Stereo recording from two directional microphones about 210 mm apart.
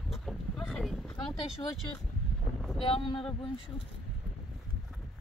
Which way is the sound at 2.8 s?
25° left (ahead or behind).